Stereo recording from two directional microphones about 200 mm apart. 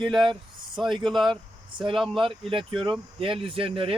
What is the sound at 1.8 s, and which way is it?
Speech, 25° right (ahead or behind).